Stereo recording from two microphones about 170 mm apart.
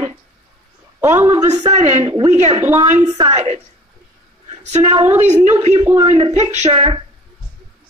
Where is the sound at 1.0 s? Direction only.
15° right (ahead or behind).